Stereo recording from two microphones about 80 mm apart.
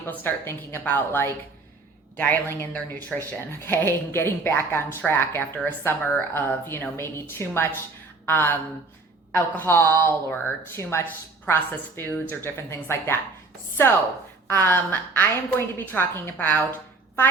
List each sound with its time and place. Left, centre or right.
0.0 s a woman's voice: left
3.1 s speech: centre
3.7 s a woman's voice: left
14.5 s a woman's voice: left